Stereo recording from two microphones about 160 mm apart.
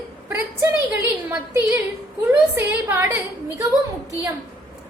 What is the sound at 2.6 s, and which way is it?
Speech, 15° right (ahead or behind).